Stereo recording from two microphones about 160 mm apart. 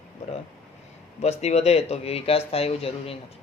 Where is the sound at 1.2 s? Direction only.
40° left (ahead or behind).